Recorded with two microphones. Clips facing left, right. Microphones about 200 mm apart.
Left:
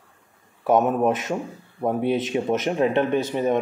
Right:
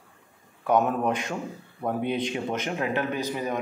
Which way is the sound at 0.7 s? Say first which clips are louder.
Left 4 dB; 20° left (ahead or behind).